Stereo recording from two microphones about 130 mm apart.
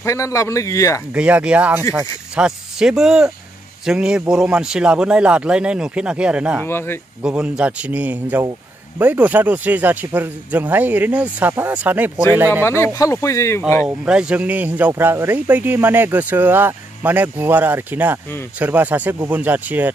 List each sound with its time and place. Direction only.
0.0 s a man's voice: 25° left (ahead or behind)
1.1 s speech: 10° right (ahead or behind)
6.6 s speech: 20° left (ahead or behind)
7.2 s speech: 10° right (ahead or behind)
12.6 s a man's voice: 20° left (ahead or behind)
13.8 s speech: 5° right (ahead or behind)